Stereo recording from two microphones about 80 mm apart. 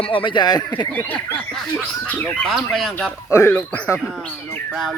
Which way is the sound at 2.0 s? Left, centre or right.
Left.